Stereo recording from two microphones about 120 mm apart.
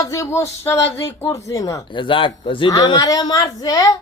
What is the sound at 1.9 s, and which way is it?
Speech, 45° left (ahead or behind).